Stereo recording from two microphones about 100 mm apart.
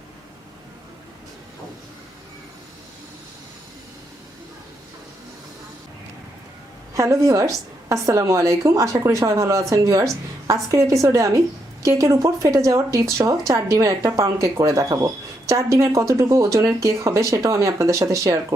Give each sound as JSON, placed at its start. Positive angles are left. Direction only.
{"t": 6.9, "sound": "speech", "side_deg": -30}